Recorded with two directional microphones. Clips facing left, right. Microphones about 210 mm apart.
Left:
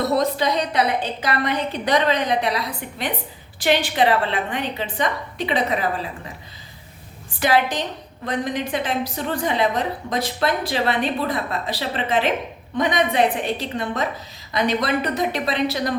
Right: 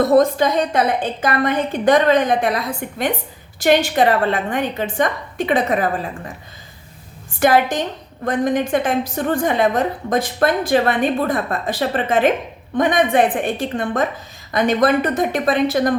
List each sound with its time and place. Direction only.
0.0 s a woman's voice: 50° right (ahead or behind)
7.3 s a woman's voice: 50° right (ahead or behind)